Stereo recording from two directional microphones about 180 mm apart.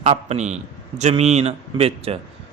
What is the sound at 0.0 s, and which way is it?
Speech, 35° right (ahead or behind).